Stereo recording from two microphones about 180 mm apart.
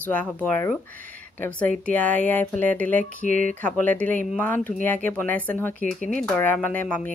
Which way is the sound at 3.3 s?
45° right (ahead or behind).